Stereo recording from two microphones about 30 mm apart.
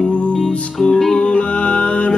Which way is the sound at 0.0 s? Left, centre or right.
Left.